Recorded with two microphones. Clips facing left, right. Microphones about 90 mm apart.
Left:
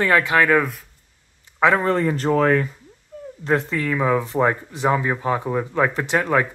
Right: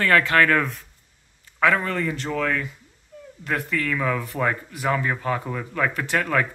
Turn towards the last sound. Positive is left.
turn(degrees=20)  # may be behind; listen again after turning